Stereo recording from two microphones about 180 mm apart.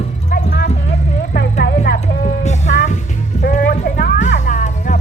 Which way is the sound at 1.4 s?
65° left (ahead or behind).